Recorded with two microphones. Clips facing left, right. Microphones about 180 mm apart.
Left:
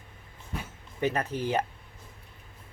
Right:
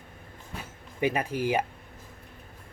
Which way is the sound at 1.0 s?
10° right (ahead or behind).